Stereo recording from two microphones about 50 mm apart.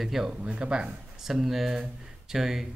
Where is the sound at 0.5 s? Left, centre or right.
Right.